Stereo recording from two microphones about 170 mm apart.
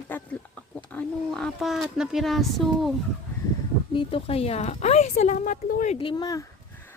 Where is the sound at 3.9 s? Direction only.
30° left (ahead or behind); by 5.9 s 50° left (ahead or behind).